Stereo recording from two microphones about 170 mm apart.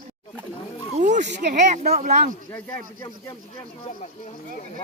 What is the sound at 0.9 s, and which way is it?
Speech, 45° right (ahead or behind).